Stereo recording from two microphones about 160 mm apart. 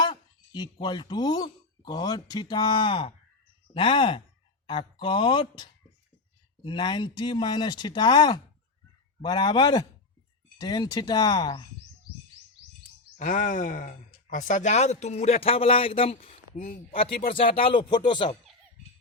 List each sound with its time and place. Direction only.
0.0 s speech: 25° left (ahead or behind)
6.7 s speech: 30° left (ahead or behind)
13.1 s speech: 55° left (ahead or behind)
16.6 s speech: 55° left (ahead or behind)
17.2 s speech: 35° left (ahead or behind)